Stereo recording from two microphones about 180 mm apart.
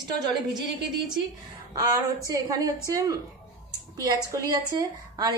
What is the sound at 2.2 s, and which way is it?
A woman's voice, 20° right (ahead or behind).